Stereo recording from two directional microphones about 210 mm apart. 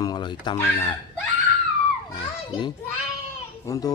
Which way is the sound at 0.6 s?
10° left (ahead or behind).